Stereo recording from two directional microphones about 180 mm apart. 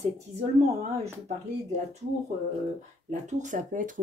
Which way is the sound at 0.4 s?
35° right (ahead or behind).